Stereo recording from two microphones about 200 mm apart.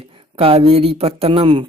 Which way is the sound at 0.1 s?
30° right (ahead or behind).